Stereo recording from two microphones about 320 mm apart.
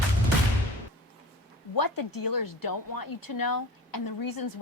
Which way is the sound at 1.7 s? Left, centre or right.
Left.